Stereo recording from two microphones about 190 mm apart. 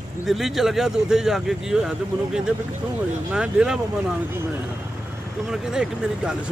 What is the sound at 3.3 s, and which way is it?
Speech, 5° right (ahead or behind).